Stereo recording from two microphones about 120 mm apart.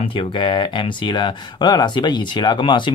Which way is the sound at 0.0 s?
45° left (ahead or behind).